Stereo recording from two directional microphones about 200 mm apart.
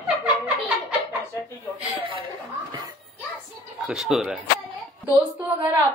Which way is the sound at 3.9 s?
Centre (ahead or behind).